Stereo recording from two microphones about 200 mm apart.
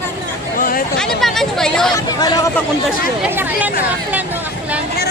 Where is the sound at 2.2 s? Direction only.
20° left (ahead or behind).